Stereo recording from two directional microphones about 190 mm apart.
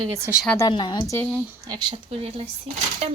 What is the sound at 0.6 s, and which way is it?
Speech, 25° left (ahead or behind).